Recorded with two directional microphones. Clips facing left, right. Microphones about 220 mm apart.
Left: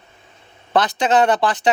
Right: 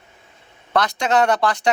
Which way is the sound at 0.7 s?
25° left (ahead or behind).